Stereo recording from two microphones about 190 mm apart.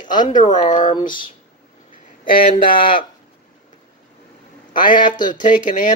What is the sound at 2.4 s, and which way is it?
Speech, 45° left (ahead or behind).